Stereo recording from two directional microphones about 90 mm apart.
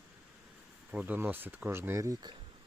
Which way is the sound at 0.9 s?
20° right (ahead or behind).